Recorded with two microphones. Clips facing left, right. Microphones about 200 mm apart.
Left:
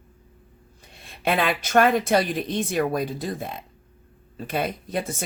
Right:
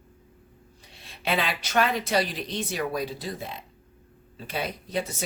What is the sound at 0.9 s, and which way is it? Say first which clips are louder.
Speech: left 4 dB; 50° left (ahead or behind).